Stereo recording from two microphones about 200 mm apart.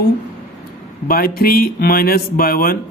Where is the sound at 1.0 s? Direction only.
45° left (ahead or behind).